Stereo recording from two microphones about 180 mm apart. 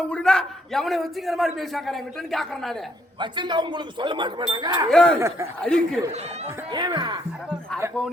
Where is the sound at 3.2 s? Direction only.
25° right (ahead or behind).